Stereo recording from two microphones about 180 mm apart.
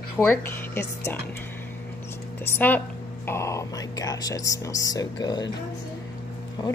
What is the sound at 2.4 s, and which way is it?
Speech, 10° left (ahead or behind).